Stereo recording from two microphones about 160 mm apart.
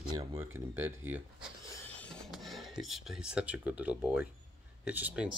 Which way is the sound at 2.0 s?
5° left (ahead or behind).